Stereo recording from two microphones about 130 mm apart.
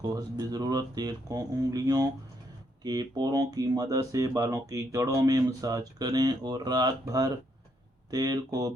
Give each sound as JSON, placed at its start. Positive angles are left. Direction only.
{"t": 0.0, "sound": "speech", "side_deg": -30}